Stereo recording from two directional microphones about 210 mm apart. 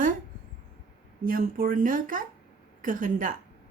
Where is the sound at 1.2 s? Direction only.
40° right (ahead or behind).